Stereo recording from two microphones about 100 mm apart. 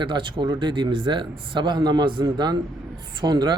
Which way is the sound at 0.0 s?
55° right (ahead or behind).